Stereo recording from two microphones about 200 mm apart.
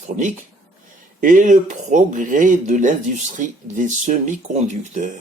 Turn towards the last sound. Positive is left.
turn(degrees=-35)  # may be behind; listen again after turning